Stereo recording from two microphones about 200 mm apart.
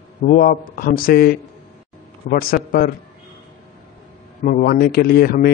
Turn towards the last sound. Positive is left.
turn(degrees=50)  # may be behind; listen again after turning